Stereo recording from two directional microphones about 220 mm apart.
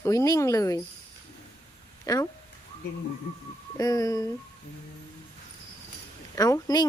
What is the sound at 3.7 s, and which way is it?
Speech, 15° left (ahead or behind).